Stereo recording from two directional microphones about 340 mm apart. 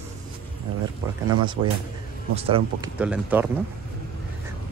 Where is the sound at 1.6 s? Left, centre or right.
Centre.